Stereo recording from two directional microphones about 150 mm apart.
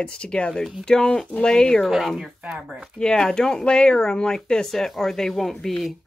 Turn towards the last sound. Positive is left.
turn(degrees=0)  # may be behind; listen again after turning